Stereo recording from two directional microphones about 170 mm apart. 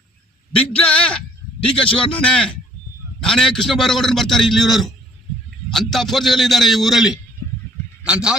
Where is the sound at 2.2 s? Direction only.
5° left (ahead or behind).